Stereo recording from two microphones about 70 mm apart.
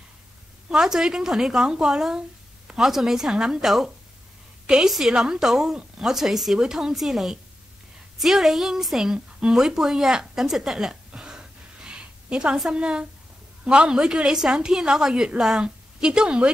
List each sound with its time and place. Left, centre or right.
0.7 s a woman's voice: centre
11.1 s gasp: centre
12.5 s a woman's voice: centre